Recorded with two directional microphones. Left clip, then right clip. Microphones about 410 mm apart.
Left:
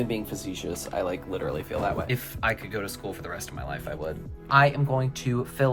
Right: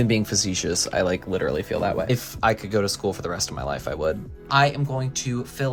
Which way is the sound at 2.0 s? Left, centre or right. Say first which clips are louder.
Right 6 dB; centre.